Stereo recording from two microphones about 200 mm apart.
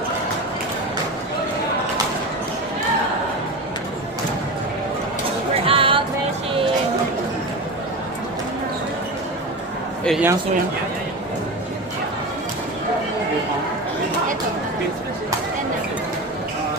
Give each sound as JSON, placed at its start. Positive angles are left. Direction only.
{"t": 5.6, "sound": "music", "side_deg": -25}
{"t": 10.1, "sound": "speech", "side_deg": -5}